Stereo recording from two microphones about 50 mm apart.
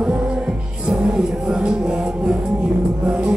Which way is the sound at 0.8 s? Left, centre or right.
Centre.